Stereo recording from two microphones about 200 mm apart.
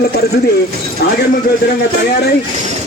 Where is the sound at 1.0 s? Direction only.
55° left (ahead or behind).